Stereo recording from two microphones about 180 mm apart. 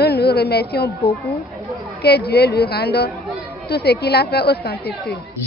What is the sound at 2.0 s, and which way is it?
A woman's voice, 65° left (ahead or behind).